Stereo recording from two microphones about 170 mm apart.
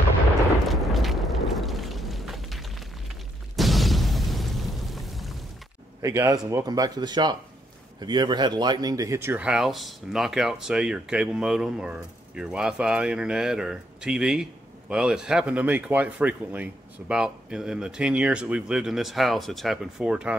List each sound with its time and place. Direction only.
0.7 s a sound: centre (ahead or behind)
3.5 s explosion: centre (ahead or behind)
6.0 s speech: 20° right (ahead or behind)